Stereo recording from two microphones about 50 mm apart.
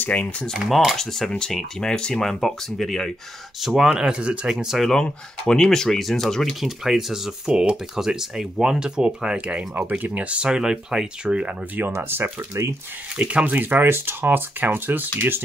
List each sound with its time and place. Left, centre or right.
0.0 s speech: left
0.7 s speech: centre
3.6 s speech: centre
3.9 s speech: centre
4.5 s speech: centre
4.9 s speech: centre
9.8 s speech: right; by 11.1 s centre
11.2 s speech: right
12.0 s speech: right
13.1 s speech: right